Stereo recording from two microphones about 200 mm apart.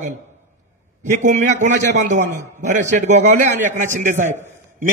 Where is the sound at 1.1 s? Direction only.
40° right (ahead or behind).